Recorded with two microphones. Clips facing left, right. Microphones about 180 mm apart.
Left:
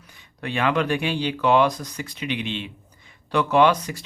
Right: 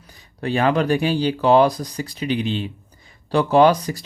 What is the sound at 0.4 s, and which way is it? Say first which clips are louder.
Speech: right 4 dB; 35° right (ahead or behind).